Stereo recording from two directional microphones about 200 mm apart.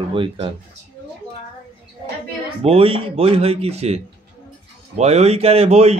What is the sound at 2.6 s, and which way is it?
Speech, 30° right (ahead or behind).